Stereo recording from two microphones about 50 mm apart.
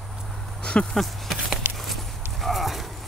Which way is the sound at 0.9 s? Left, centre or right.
Centre.